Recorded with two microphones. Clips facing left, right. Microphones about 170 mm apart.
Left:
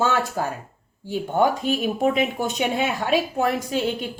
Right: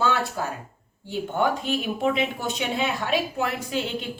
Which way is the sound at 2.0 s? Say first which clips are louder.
Left 3 dB; 45° left (ahead or behind).